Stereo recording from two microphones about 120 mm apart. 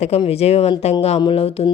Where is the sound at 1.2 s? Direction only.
50° left (ahead or behind).